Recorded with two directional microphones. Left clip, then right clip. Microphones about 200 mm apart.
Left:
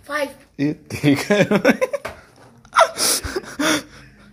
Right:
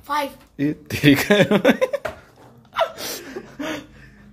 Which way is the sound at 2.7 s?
25° left (ahead or behind).